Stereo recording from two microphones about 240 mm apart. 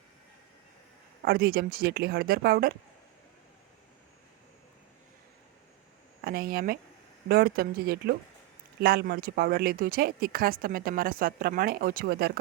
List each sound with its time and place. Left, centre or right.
1.2 s speech: right
6.2 s speech: right